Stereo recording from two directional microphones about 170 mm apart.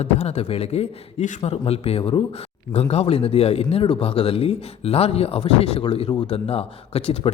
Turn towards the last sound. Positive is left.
turn(degrees=35)  # may be behind; listen again after turning